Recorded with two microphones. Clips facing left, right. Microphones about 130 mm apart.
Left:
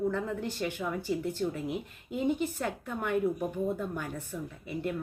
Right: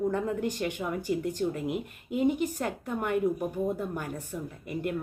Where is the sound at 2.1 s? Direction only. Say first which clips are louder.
Right 3 dB; 10° right (ahead or behind).